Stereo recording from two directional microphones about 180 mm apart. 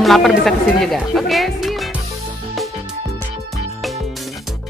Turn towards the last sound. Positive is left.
turn(degrees=0)  # may be behind; listen again after turning